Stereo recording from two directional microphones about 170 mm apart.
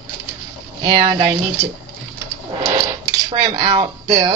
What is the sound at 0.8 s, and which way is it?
Speech, 25° right (ahead or behind).